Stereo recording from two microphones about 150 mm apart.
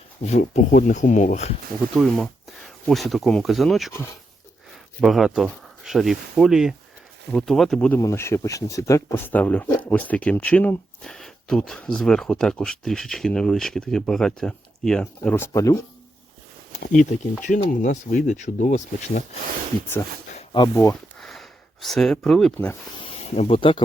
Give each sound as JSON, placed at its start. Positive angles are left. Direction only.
{"t": 0.3, "sound": "speech", "side_deg": 50}
{"t": 2.0, "sound": "speech", "side_deg": 0}
{"t": 4.9, "sound": "speech", "side_deg": 0}
{"t": 7.9, "sound": "speech", "side_deg": 20}
{"t": 16.8, "sound": "speech", "side_deg": 60}
{"t": 20.9, "sound": "a sound", "side_deg": 0}
{"t": 22.5, "sound": "speech", "side_deg": 15}
{"t": 23.0, "sound": "speech", "side_deg": 40}